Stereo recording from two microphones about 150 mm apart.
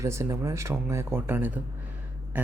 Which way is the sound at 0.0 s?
20° right (ahead or behind).